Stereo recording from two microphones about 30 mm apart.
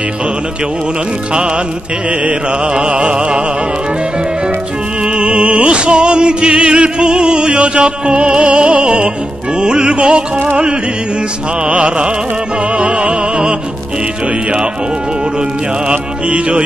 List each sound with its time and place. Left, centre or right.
2.0 s mantra: right
2.9 s music: right
5.1 s music: right
5.7 s music: right
11.6 s mantra: right
12.7 s music: right
16.3 s music: right